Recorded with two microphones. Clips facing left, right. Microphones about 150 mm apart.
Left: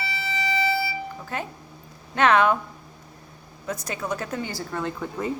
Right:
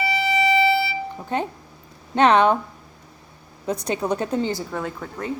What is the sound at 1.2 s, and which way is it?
Speech, 25° right (ahead or behind).